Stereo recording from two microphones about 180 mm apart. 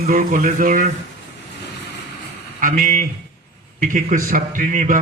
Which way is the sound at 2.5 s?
50° right (ahead or behind).